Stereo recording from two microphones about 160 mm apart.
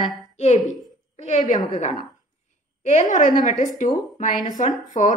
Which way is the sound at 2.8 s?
50° left (ahead or behind).